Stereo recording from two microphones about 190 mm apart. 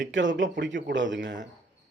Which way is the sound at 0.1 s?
70° right (ahead or behind).